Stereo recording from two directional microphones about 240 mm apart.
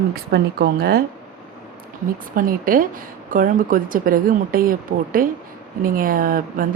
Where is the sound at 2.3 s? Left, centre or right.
Right.